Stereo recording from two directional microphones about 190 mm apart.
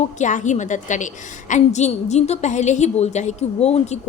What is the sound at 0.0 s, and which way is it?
A woman's voice, 40° left (ahead or behind).